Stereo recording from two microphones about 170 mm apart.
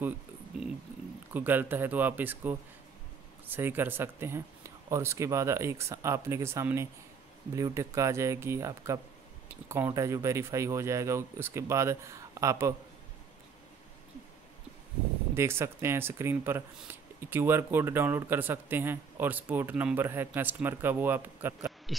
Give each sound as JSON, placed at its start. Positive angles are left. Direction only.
{"t": 1.3, "sound": "speech", "side_deg": -10}
{"t": 15.3, "sound": "speech", "side_deg": -15}